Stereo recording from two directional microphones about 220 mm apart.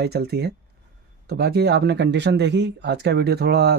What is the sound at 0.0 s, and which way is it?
Speech, 50° right (ahead or behind).